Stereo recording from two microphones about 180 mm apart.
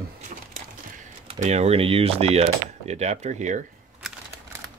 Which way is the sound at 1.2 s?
35° right (ahead or behind).